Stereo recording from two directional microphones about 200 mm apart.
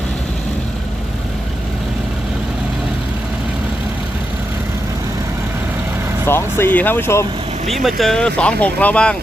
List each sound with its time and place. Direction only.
6.2 s speech: 10° left (ahead or behind)
7.7 s speech: centre (ahead or behind)